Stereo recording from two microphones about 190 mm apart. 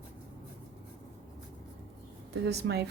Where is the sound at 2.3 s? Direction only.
60° right (ahead or behind).